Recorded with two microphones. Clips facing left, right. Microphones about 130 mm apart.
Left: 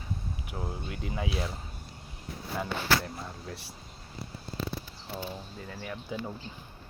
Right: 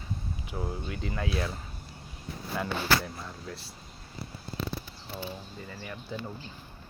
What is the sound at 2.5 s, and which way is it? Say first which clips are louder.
Speech: right 1 dB; centre (ahead or behind).